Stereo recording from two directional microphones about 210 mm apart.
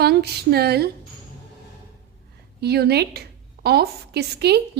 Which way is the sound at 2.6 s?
50° right (ahead or behind).